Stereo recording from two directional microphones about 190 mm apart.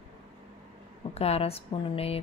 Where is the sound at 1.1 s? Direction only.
30° left (ahead or behind).